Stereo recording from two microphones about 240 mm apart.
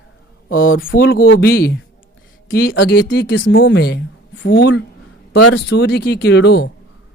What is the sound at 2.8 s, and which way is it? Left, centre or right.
A woman's voice, left.